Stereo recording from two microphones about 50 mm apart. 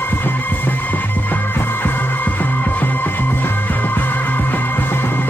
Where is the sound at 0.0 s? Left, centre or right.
Left.